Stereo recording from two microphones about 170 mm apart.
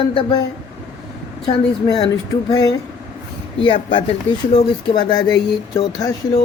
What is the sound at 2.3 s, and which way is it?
Speech, 20° left (ahead or behind).